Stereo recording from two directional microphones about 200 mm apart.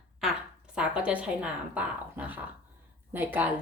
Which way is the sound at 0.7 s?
5° right (ahead or behind).